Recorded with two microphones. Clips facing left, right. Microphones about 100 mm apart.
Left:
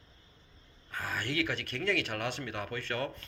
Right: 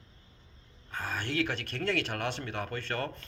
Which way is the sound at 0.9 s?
25° right (ahead or behind).